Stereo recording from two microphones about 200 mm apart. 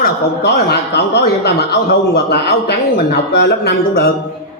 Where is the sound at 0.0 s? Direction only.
55° left (ahead or behind).